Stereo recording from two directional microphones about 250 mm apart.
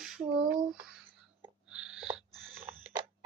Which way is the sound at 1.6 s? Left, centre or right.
Centre.